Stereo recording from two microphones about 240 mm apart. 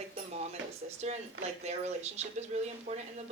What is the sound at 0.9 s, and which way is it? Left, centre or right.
Speech, right.